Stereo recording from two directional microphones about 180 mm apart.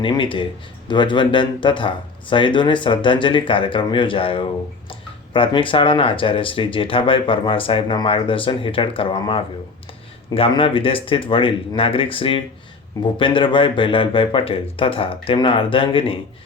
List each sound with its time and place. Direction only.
0.0 s speech: 25° left (ahead or behind)